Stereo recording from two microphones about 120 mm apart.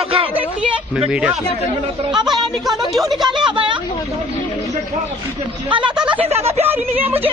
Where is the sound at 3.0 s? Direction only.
35° right (ahead or behind).